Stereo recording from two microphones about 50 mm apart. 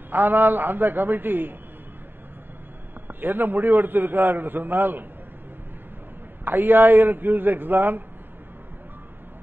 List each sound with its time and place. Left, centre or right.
0.1 s a man's voice: right
3.1 s a man's voice: right
6.4 s a man's voice: right